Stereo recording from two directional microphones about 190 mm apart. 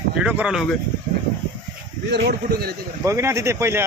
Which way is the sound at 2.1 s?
55° right (ahead or behind).